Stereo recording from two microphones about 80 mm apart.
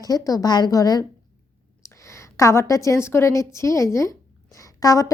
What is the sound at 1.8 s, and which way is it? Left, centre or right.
A woman's voice, left.